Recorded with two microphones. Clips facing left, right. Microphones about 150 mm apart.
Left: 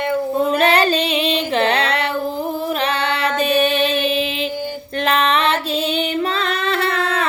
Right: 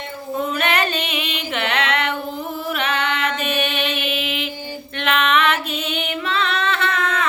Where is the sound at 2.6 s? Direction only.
35° left (ahead or behind).